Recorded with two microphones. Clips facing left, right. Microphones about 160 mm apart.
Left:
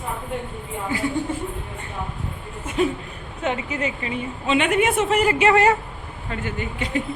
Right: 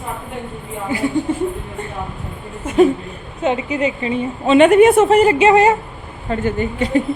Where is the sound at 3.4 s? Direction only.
20° right (ahead or behind).